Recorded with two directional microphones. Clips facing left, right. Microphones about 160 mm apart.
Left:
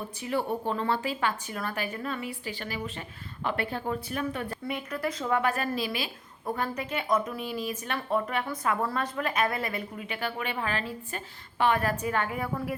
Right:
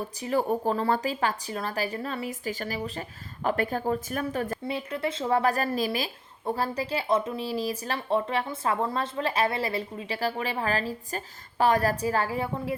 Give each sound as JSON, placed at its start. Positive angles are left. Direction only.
{"t": 0.2, "sound": "a woman's voice", "side_deg": -40}
{"t": 4.6, "sound": "a woman's voice", "side_deg": -25}
{"t": 6.4, "sound": "a woman's voice", "side_deg": -30}